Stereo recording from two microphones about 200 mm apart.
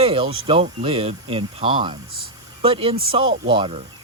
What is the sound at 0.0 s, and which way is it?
Speech, 25° right (ahead or behind).